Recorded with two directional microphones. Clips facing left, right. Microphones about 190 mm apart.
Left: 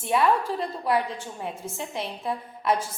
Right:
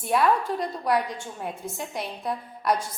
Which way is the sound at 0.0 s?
Centre (ahead or behind).